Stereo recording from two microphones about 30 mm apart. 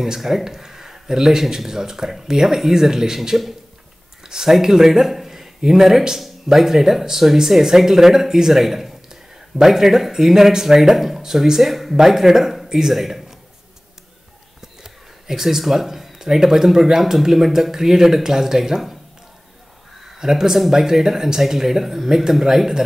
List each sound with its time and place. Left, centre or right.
0.0 s speech: centre
4.2 s speech: centre
9.1 s a sound: centre
10.1 s speech: centre
12.6 s a sound: centre
12.9 s a man's voice: centre
14.8 s speech: centre
20.2 s speech: centre